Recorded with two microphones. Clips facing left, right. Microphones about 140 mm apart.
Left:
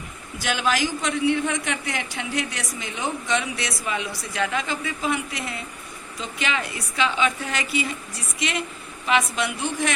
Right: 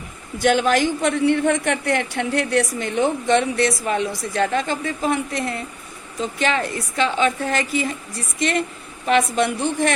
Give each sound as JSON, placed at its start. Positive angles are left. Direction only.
{"t": 0.3, "sound": "a woman's voice", "side_deg": -55}